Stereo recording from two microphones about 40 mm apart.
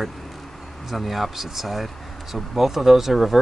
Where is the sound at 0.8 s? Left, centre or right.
Centre.